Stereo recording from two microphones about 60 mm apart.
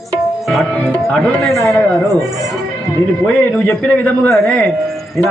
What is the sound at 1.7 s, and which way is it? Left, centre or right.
Speech, left.